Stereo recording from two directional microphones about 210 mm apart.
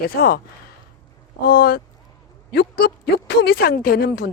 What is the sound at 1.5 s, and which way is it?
Speech, 45° left (ahead or behind).